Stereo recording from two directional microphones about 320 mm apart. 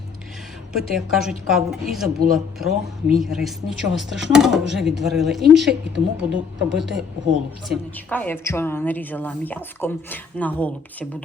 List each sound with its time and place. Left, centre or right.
0.7 s a woman's voice: centre
5.8 s speech: right
6.7 s a woman's voice: centre